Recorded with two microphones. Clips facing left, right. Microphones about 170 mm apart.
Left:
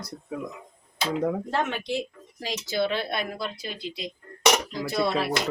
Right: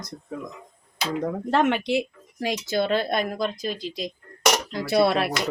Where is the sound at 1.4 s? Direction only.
70° right (ahead or behind); by 3.7 s 45° right (ahead or behind).